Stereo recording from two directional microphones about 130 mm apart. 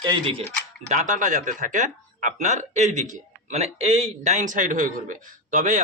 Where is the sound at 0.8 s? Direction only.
70° right (ahead or behind).